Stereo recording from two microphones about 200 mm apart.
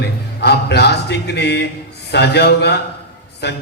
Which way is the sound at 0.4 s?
55° left (ahead or behind).